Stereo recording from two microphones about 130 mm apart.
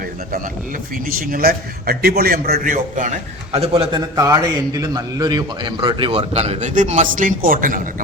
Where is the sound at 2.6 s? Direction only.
85° right.